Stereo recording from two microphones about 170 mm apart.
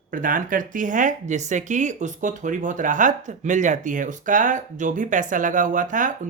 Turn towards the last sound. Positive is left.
turn(degrees=-50)  # may be behind; listen again after turning